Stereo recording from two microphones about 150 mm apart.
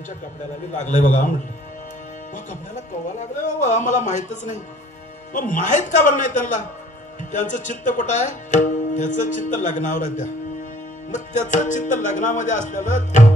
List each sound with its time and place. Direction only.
0.7 s speech: 55° left (ahead or behind)
2.3 s speech: 55° left (ahead or behind)